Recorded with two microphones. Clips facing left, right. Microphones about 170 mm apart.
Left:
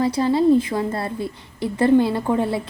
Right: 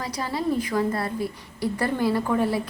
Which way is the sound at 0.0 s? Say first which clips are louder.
Left 10 dB; 25° left (ahead or behind).